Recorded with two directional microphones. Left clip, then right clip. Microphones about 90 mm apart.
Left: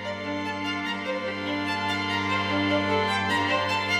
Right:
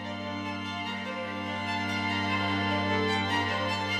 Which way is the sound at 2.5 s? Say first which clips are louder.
Left 4 dB; 20° left (ahead or behind).